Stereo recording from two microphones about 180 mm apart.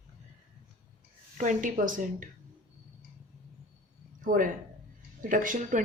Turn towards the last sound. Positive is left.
turn(degrees=-45)  # may be behind; listen again after turning